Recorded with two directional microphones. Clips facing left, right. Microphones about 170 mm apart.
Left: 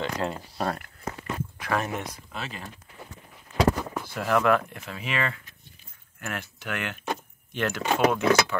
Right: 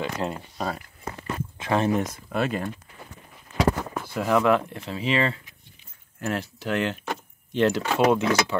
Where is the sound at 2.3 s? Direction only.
55° right (ahead or behind).